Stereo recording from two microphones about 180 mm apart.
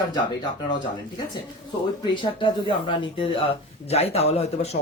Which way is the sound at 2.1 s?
30° left (ahead or behind).